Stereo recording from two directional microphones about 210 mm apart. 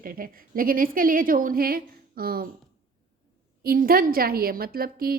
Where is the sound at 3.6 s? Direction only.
45° right (ahead or behind).